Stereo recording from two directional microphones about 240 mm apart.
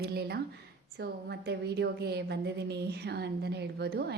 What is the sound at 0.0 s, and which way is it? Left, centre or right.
A woman's voice, right.